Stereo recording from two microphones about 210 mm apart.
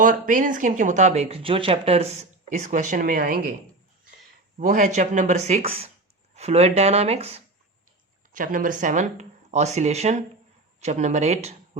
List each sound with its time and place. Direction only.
0.0 s speech: 40° right (ahead or behind)
4.5 s speech: 40° right (ahead or behind)
8.3 s speech: 40° right (ahead or behind)